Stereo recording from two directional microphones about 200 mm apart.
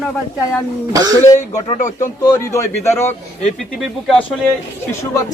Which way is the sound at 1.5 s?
35° left (ahead or behind).